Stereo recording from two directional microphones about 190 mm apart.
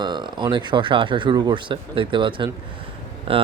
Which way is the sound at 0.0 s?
25° right (ahead or behind).